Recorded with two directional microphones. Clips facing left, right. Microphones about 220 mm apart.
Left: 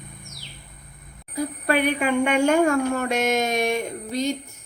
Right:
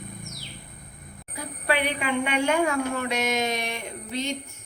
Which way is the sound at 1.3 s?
45° left (ahead or behind).